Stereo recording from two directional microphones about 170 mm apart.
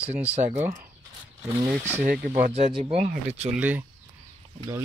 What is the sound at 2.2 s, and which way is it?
Speech, 50° right (ahead or behind).